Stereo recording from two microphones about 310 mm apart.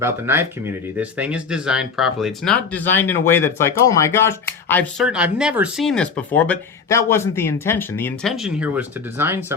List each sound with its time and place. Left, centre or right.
0.0 s speech: centre